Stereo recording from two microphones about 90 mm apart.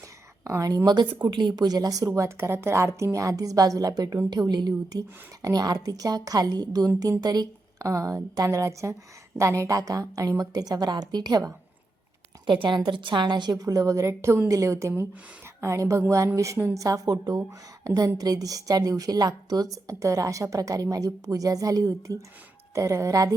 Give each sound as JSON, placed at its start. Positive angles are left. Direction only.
{"t": 0.4, "sound": "a woman's voice", "side_deg": -40}
{"t": 0.9, "sound": "a woman's voice", "side_deg": -60}
{"t": 12.5, "sound": "a woman's voice", "side_deg": -60}